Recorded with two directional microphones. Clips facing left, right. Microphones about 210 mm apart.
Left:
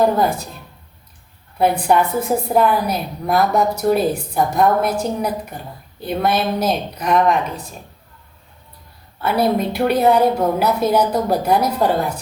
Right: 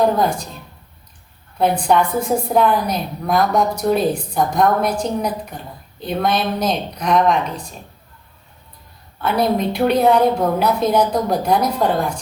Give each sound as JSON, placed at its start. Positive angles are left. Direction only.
{"t": 0.0, "sound": "a woman's voice", "side_deg": 5}
{"t": 1.9, "sound": "a woman's voice", "side_deg": 5}
{"t": 9.2, "sound": "a woman's voice", "side_deg": 5}